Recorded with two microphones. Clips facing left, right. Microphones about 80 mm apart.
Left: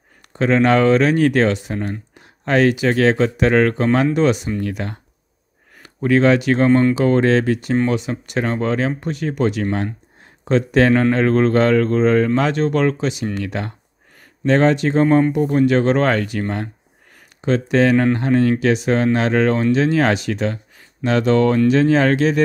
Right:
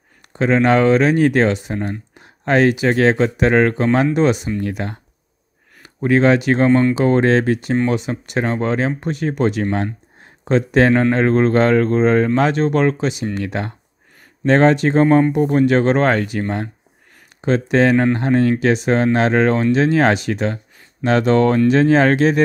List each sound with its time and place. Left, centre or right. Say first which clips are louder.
0.3 s speech: even; centre
6.0 s speech: even; right
14.4 s speech: right 2 dB; right; by 16.6 s centre
17.4 s speech: right 1 dB; right